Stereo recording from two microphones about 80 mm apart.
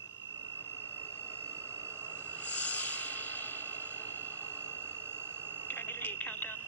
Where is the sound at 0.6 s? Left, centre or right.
Left.